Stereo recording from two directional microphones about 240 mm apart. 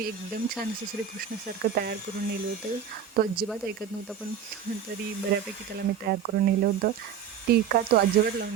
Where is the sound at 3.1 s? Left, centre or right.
Right.